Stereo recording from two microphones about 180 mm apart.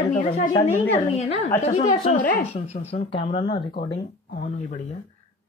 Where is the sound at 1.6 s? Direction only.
40° left (ahead or behind).